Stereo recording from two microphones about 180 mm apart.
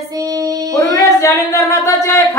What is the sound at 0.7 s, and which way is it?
Singing, 15° left (ahead or behind).